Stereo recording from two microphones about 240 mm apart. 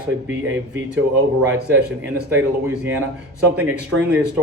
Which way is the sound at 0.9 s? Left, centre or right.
Centre.